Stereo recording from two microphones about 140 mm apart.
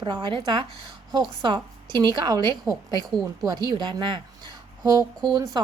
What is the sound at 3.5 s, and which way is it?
A woman's voice, 30° right (ahead or behind).